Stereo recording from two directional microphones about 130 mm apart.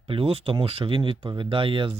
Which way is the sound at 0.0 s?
50° right (ahead or behind).